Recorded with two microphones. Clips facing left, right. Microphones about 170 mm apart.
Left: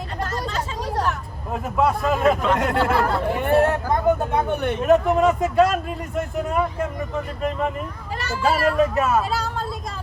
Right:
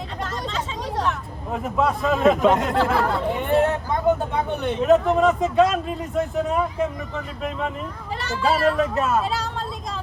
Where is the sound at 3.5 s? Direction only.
60° left (ahead or behind).